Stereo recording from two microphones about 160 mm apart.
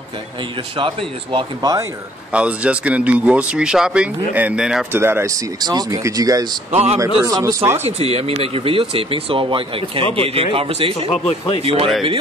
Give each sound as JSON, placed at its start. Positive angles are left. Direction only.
{"t": 0.4, "sound": "speech", "side_deg": -30}
{"t": 2.3, "sound": "speech", "side_deg": -5}
{"t": 6.7, "sound": "speech", "side_deg": -40}
{"t": 7.2, "sound": "speech", "side_deg": -20}
{"t": 7.8, "sound": "speech", "side_deg": -40}
{"t": 11.1, "sound": "speech", "side_deg": 40}
{"t": 11.6, "sound": "speech", "side_deg": -35}